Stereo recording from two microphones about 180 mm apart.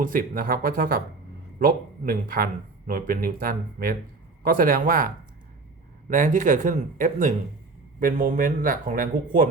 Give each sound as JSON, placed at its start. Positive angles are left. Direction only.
{"t": 0.0, "sound": "speech", "side_deg": -50}